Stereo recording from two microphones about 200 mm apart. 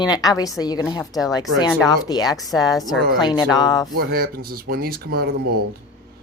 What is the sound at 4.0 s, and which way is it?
Speech, 50° right (ahead or behind).